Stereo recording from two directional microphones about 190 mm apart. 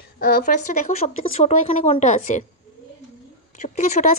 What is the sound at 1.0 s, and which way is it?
A woman's voice, 35° left (ahead or behind).